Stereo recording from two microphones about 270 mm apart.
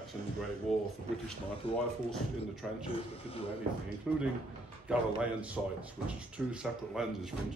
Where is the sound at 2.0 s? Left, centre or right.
Centre.